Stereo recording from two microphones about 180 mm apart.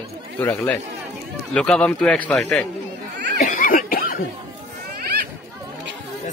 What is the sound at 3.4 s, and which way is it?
Snicker, 45° left (ahead or behind).